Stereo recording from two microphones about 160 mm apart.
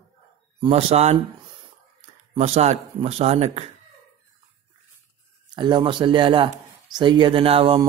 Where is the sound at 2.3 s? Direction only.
40° right (ahead or behind).